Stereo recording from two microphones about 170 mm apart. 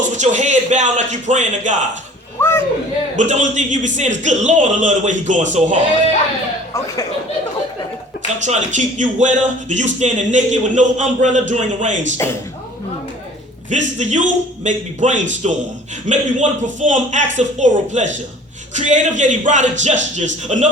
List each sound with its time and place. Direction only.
0.1 s speech: 45° right (ahead or behind)
2.4 s speech: 15° left (ahead or behind)
3.2 s speech: 45° right (ahead or behind)
6.7 s speech: 20° left (ahead or behind)
8.4 s speech: 45° right (ahead or behind)
12.1 s speech: 15° left (ahead or behind)
13.7 s speech: 45° right (ahead or behind)